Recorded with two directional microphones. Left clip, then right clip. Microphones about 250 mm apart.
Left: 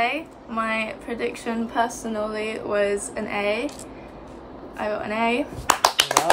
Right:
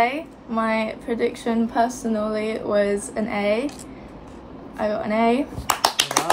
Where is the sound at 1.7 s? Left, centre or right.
Centre.